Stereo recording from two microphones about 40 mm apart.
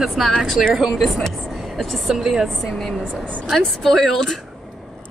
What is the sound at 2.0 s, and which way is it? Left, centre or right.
Speech, centre.